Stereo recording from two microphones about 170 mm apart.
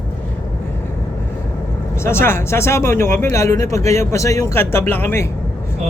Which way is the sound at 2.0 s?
15° left (ahead or behind).